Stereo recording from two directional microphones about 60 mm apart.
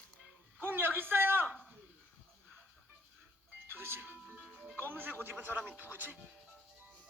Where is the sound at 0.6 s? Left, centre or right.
Right.